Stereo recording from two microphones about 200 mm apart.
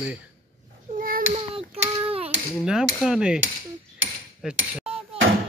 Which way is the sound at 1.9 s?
30° right (ahead or behind).